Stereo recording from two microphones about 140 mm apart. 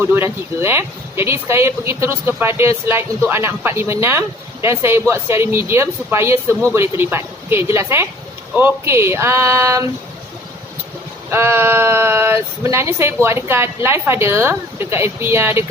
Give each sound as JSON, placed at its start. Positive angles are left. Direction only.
{"t": 0.0, "sound": "speech", "side_deg": -15}
{"t": 11.3, "sound": "speech", "side_deg": -15}